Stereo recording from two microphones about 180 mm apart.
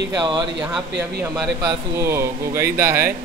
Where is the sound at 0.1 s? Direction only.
20° right (ahead or behind).